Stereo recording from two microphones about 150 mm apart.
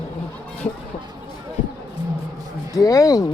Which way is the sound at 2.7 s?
20° left (ahead or behind).